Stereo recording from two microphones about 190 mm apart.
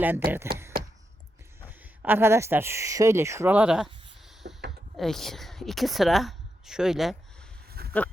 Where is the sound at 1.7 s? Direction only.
10° right (ahead or behind).